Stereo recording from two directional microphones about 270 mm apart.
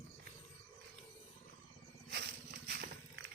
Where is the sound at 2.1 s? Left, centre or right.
Right.